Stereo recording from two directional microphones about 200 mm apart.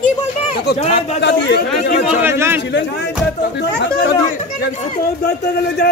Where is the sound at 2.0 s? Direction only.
10° right (ahead or behind).